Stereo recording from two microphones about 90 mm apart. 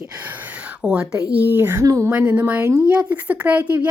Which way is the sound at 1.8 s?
35° right (ahead or behind).